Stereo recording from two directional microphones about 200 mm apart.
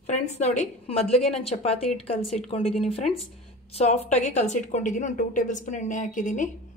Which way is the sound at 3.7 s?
35° left (ahead or behind).